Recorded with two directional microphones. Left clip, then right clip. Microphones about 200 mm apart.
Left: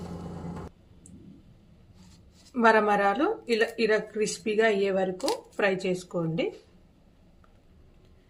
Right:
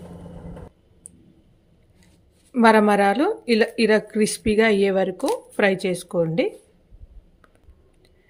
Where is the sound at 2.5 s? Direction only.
45° right (ahead or behind).